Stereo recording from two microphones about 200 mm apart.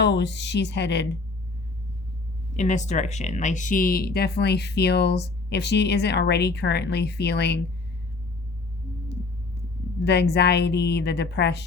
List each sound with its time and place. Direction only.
0.0 s speech: 60° left (ahead or behind)
2.6 s speech: 35° left (ahead or behind); by 7.6 s 55° left (ahead or behind)
10.0 s speech: 55° left (ahead or behind)